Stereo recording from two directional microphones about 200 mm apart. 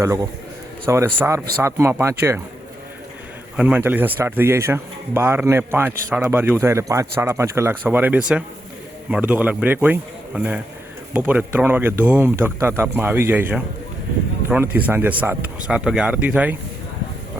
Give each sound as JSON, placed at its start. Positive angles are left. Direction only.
{"t": 0.0, "sound": "a man's voice", "side_deg": -15}
{"t": 3.6, "sound": "a man's voice", "side_deg": -10}